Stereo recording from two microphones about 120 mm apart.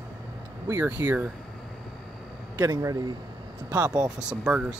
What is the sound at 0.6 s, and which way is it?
Speech, 20° right (ahead or behind).